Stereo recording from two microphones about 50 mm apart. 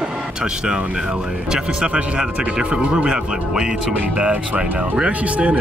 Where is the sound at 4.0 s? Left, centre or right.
Right.